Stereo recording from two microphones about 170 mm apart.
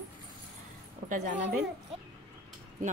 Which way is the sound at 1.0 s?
50° right (ahead or behind).